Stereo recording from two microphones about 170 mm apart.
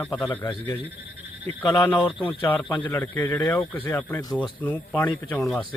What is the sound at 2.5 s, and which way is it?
Speech, 10° left (ahead or behind).